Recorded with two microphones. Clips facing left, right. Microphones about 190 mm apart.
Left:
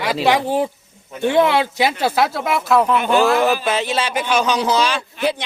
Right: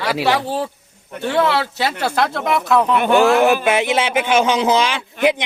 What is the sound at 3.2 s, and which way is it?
Speech, 15° right (ahead or behind).